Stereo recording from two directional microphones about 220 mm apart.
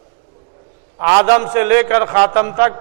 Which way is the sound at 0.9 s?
15° right (ahead or behind).